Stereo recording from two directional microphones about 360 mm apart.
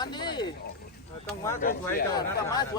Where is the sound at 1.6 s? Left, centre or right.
Left.